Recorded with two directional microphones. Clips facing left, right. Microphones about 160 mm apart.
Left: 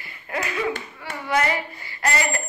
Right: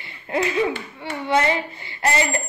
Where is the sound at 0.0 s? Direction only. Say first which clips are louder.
Right 6 dB; 25° right (ahead or behind).